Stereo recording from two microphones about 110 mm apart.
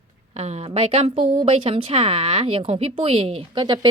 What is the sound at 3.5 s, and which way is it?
Speech, 40° right (ahead or behind).